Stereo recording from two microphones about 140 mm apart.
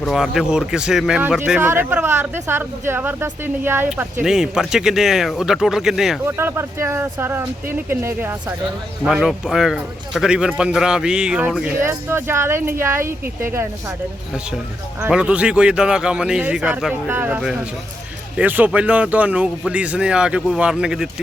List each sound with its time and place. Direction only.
0.0 s a man's voice: 5° right (ahead or behind)
3.8 s a man's voice: 5° right (ahead or behind)
6.2 s a man's voice: 15° right (ahead or behind)
9.0 s a man's voice: 5° right (ahead or behind)
15.0 s a man's voice: 10° right (ahead or behind)